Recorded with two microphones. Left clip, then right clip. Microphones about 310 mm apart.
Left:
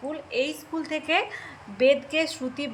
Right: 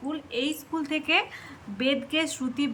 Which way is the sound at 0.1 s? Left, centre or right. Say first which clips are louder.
Left 2 dB; centre.